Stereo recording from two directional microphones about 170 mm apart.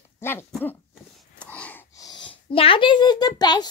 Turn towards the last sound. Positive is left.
turn(degrees=25)  # may be behind; listen again after turning